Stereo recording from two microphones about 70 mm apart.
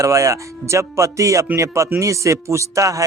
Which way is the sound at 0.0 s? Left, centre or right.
Right.